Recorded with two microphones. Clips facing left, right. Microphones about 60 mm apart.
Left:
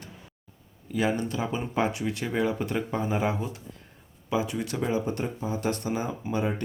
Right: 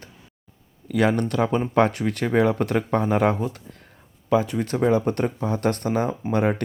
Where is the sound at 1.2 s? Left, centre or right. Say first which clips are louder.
Right 8 dB; right.